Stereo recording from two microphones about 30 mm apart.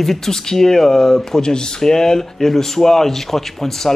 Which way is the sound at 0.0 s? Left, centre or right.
Centre.